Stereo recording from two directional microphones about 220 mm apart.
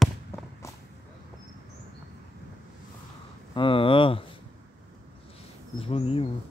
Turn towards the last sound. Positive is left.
turn(degrees=25)  # may be behind; listen again after turning